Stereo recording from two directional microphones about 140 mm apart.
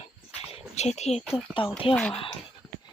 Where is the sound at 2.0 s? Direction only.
5° left (ahead or behind).